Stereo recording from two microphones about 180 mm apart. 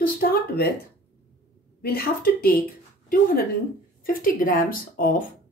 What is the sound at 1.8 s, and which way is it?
Speech, 55° left (ahead or behind).